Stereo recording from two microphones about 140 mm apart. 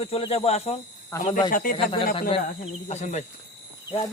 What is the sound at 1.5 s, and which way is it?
Speech, 75° left (ahead or behind).